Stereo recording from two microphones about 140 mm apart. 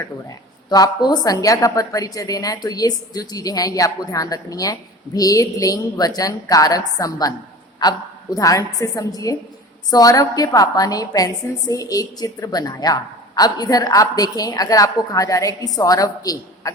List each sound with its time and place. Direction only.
0.0 s a woman's voice: 25° left (ahead or behind)